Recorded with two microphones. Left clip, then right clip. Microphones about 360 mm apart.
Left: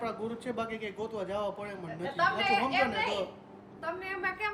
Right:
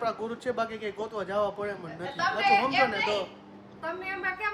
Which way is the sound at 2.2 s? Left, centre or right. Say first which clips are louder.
Right 4 dB; centre.